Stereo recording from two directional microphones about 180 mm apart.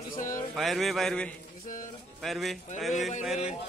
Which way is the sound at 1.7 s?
45° left (ahead or behind).